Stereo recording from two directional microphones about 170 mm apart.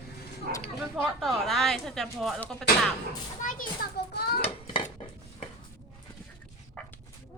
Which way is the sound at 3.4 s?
50° left (ahead or behind).